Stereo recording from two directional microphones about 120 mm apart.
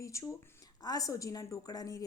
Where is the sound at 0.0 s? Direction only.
25° left (ahead or behind).